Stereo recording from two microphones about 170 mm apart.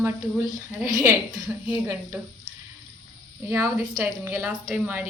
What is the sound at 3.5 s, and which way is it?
A woman's voice, 15° right (ahead or behind).